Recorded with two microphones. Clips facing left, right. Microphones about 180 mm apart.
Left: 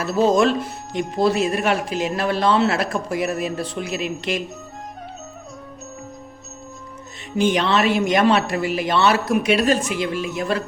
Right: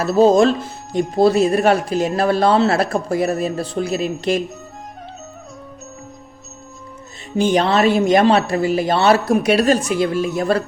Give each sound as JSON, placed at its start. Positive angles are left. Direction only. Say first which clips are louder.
{"t": 0.0, "sound": "speech", "louder": "right 5 dB", "side_deg": -35}
{"t": 7.3, "sound": "speech", "louder": "right 3 dB", "side_deg": -35}